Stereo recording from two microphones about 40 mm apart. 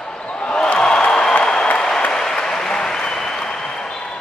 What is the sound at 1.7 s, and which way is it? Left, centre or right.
Applause, centre.